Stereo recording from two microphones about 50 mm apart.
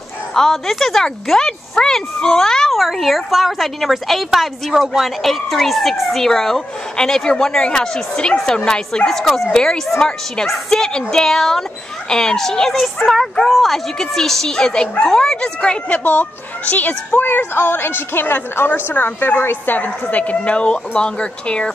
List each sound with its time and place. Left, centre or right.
0.3 s speech: centre
2.7 s a woman's voice: centre
9.1 s a woman's voice: centre
16.0 s a woman's voice: left